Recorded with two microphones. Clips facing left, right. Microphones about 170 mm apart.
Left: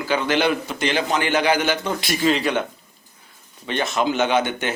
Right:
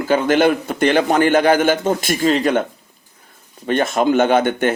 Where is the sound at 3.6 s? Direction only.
50° right (ahead or behind).